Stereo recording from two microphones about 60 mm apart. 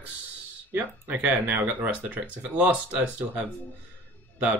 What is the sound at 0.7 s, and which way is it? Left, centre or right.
Speech, right.